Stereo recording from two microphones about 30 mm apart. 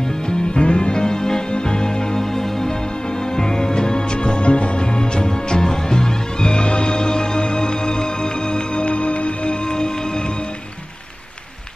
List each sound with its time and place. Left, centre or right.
0.3 s music: left
9.7 s music: left